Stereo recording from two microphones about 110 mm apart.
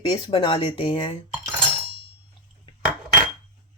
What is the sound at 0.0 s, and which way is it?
Speech, 45° left (ahead or behind).